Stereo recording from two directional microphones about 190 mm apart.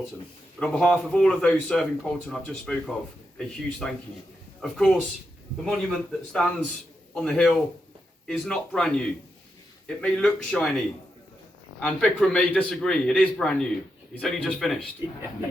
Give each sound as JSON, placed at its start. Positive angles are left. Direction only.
{"t": 0.6, "sound": "speech", "side_deg": 5}
{"t": 11.8, "sound": "speech", "side_deg": 5}